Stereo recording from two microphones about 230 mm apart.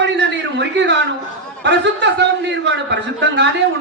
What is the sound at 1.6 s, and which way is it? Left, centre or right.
A woman's voice, right.